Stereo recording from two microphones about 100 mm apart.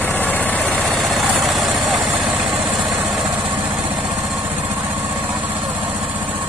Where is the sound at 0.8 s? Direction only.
Centre (ahead or behind).